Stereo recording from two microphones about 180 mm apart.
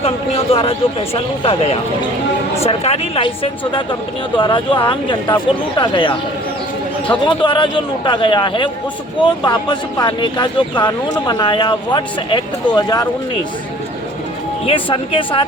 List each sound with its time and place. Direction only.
0.0 s a man's voice: 35° left (ahead or behind)
7.3 s speech: 25° left (ahead or behind)
14.7 s speech: 30° left (ahead or behind)